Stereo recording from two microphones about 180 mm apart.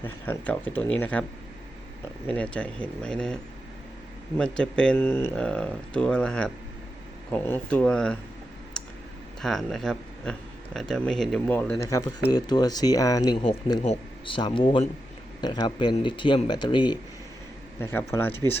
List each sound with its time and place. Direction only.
0.0 s speech: 10° left (ahead or behind)
2.2 s speech: 5° left (ahead or behind)
9.4 s speech: centre (ahead or behind); by 17.0 s 25° left (ahead or behind)
17.7 s speech: 15° left (ahead or behind)